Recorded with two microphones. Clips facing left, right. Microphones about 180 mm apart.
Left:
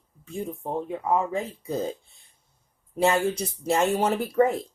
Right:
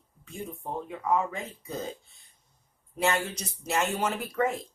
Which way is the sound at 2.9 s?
30° left (ahead or behind).